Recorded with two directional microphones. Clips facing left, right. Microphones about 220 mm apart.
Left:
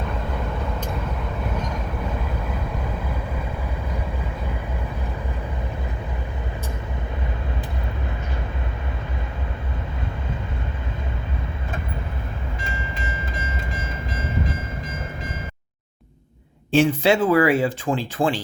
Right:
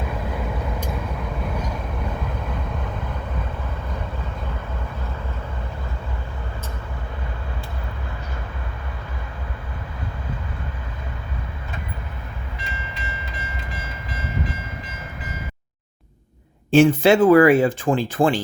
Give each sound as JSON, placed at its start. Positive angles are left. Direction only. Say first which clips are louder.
{"t": 0.0, "sound": "vehicle", "louder": "even", "side_deg": -5}
{"t": 1.5, "sound": "train", "louder": "even", "side_deg": -10}
{"t": 2.5, "sound": "vehicle", "louder": "left 1 dB", "side_deg": 10}
{"t": 12.5, "sound": "train", "louder": "left 3 dB", "side_deg": 50}
{"t": 16.7, "sound": "speech", "louder": "right 4 dB", "side_deg": -50}